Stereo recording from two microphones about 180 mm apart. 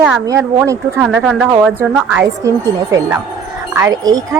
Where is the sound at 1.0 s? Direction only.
5° right (ahead or behind).